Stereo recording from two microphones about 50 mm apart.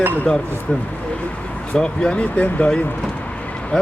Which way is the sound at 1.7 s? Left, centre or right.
Centre.